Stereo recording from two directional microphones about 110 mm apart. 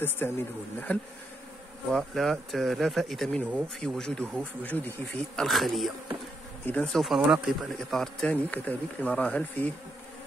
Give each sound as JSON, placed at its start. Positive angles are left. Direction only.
{"t": 0.2, "sound": "speech", "side_deg": 20}
{"t": 0.9, "sound": "bee", "side_deg": 15}
{"t": 1.9, "sound": "speech", "side_deg": 5}
{"t": 5.4, "sound": "speech", "side_deg": 0}
{"t": 6.6, "sound": "bee", "side_deg": 15}
{"t": 6.9, "sound": "speech", "side_deg": 0}